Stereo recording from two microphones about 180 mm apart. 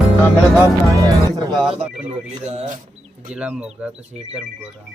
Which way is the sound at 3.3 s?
5° right (ahead or behind).